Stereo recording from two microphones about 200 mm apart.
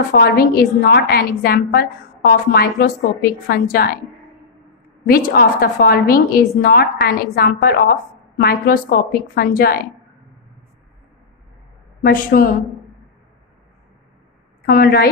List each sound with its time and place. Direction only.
0.1 s a woman's voice: 50° left (ahead or behind)
5.0 s a woman's voice: 45° left (ahead or behind)
12.0 s a woman's voice: 45° left (ahead or behind)
14.7 s a woman's voice: 50° left (ahead or behind)